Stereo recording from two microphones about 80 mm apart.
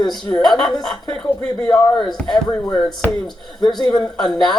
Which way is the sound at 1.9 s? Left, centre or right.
Left.